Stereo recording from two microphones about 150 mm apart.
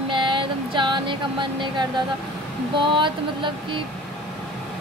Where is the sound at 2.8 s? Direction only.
35° right (ahead or behind).